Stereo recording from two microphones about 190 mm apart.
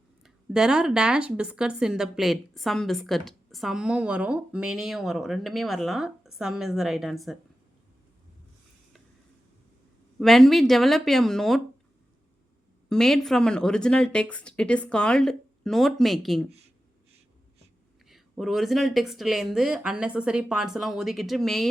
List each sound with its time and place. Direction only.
0.2 s speech: 5° right (ahead or behind)
10.2 s speech: centre (ahead or behind)
12.9 s speech: centre (ahead or behind)
18.0 s speech: centre (ahead or behind)